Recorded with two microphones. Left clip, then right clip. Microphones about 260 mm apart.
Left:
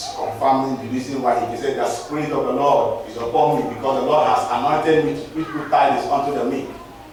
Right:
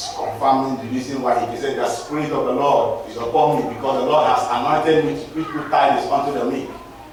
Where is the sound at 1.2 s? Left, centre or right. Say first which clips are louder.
Even; centre.